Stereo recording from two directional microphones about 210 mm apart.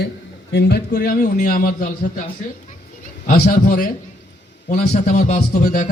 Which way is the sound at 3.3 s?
40° left (ahead or behind).